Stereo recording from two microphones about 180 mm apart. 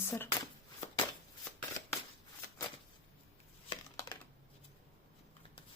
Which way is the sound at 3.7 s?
25° left (ahead or behind).